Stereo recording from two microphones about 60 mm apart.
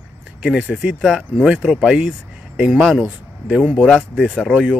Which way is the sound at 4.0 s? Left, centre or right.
Centre.